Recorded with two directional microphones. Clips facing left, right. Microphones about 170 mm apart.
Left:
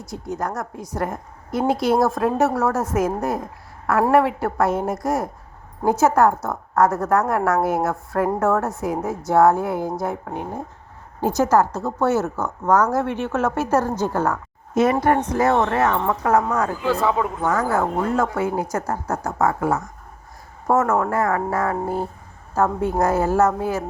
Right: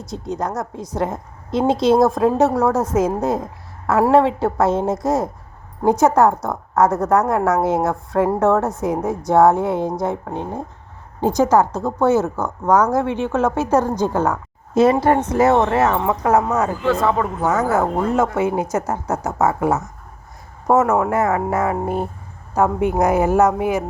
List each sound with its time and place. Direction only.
0.1 s a woman's voice: 20° right (ahead or behind)
16.8 s a man's voice: 5° left (ahead or behind)
17.2 s a woman's voice: 20° right (ahead or behind)